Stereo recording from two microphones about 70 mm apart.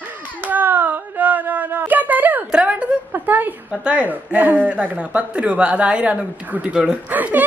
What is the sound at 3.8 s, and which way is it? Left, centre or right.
Speech, centre.